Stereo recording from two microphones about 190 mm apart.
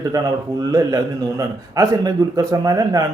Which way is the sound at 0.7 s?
20° right (ahead or behind).